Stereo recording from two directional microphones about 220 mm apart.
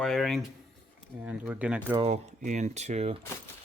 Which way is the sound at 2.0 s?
30° right (ahead or behind).